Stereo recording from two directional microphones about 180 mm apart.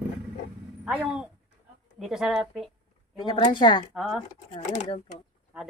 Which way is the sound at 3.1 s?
25° left (ahead or behind).